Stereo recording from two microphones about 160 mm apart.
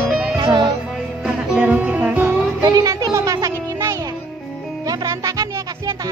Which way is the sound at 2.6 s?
25° right (ahead or behind).